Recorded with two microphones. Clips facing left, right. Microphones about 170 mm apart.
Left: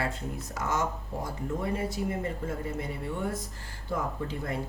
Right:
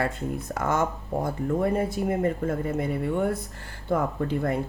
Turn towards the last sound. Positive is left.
turn(degrees=-55)  # may be behind; listen again after turning